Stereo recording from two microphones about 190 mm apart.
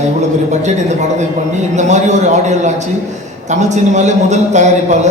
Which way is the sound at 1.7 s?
40° right (ahead or behind).